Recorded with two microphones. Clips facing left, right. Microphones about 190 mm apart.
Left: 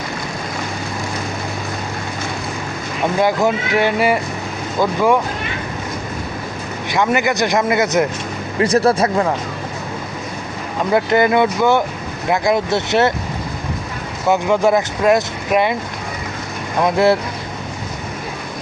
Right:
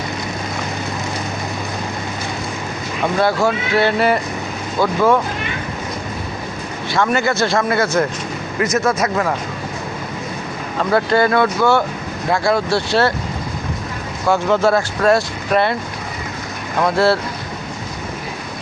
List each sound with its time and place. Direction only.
3.2 s speech: 15° left (ahead or behind)
6.9 s speech: 15° left (ahead or behind)
8.6 s speech: 30° left (ahead or behind)
10.9 s speech: 20° left (ahead or behind)
14.3 s speech: 15° left (ahead or behind)
16.8 s speech: 20° left (ahead or behind)